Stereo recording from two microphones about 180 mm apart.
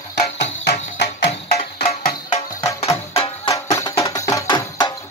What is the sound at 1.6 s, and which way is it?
Music, 35° left (ahead or behind).